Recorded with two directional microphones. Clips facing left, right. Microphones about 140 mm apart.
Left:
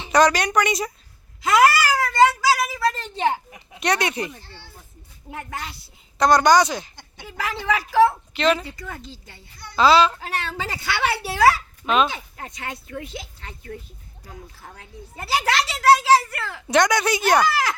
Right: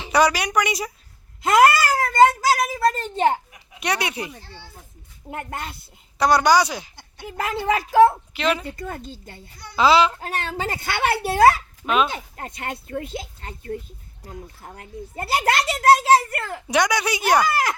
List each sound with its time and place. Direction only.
0.1 s speech: 10° right (ahead or behind)
1.5 s a child's voice: 50° right (ahead or behind)
3.8 s speech: 10° right (ahead or behind)
5.3 s a child's voice: 50° right (ahead or behind)
6.1 s speech: 10° right (ahead or behind)
7.6 s a child's voice: 45° right (ahead or behind)
8.3 s speech: 10° right (ahead or behind)
8.6 s a child's voice: 50° right (ahead or behind)
9.7 s speech: 15° right (ahead or behind)
10.2 s a child's voice: 45° right (ahead or behind)
14.8 s a child's voice: 50° right (ahead or behind)
16.6 s speech: 10° right (ahead or behind)
17.5 s a child's voice: 50° right (ahead or behind)